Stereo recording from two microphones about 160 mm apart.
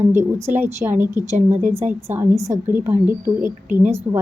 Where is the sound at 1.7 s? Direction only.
15° right (ahead or behind).